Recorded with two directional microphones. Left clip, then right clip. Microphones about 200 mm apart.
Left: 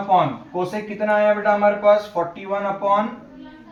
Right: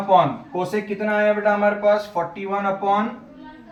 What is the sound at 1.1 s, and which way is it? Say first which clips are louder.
Speech: left 1 dB; 10° left (ahead or behind).